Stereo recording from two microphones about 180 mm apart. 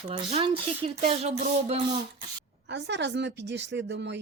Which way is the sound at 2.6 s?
75° right (ahead or behind).